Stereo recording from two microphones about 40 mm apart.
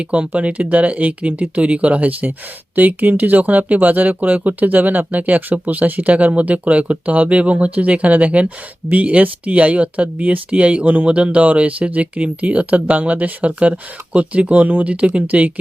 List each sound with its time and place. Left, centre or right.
0.0 s speech: right